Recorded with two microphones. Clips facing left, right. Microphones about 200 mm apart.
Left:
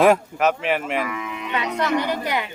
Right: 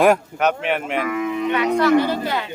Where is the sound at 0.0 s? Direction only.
Centre (ahead or behind).